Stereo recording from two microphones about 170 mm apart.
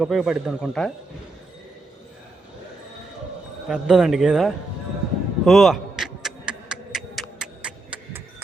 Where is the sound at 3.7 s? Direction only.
5° right (ahead or behind).